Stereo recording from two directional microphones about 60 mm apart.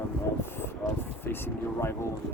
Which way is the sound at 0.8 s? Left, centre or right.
Left.